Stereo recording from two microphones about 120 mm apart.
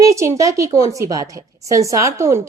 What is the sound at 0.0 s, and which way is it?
A woman's voice, 25° right (ahead or behind).